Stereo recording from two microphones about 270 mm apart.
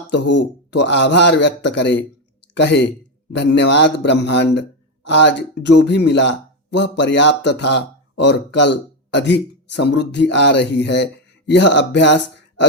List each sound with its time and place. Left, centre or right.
0.1 s a man's voice: left